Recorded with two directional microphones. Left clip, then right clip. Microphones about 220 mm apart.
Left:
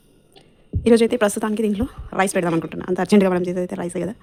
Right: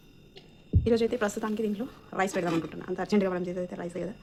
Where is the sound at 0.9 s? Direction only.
50° left (ahead or behind).